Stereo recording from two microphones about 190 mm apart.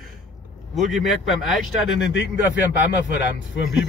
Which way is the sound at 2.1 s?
70° left (ahead or behind).